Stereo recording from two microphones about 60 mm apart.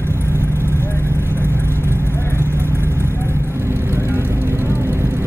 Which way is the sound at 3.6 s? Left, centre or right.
Right.